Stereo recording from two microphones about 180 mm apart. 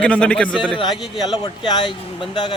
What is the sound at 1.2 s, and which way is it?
Speech, 20° left (ahead or behind).